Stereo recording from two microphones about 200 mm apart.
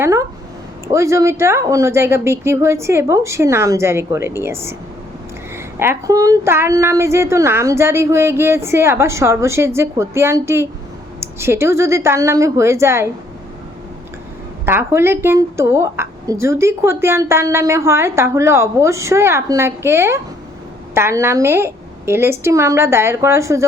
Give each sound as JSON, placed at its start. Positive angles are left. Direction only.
{"t": 0.0, "sound": "a woman's voice", "side_deg": -15}
{"t": 5.8, "sound": "a woman's voice", "side_deg": -15}
{"t": 14.6, "sound": "a woman's voice", "side_deg": -10}